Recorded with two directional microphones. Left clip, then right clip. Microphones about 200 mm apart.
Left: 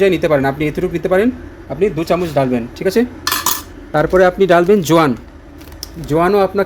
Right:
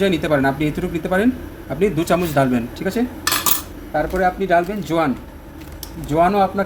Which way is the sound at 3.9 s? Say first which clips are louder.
Left 7 dB; 60° left (ahead or behind).